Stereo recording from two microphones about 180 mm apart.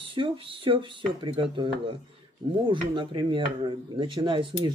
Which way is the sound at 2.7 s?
25° right (ahead or behind).